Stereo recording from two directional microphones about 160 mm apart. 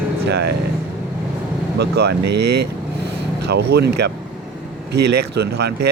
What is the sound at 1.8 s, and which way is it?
Speech, 90° right.